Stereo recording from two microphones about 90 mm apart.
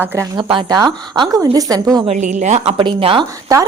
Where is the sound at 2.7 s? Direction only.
75° right (ahead or behind).